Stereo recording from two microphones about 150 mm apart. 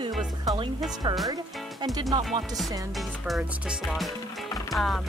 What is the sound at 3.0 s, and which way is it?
Music, centre (ahead or behind).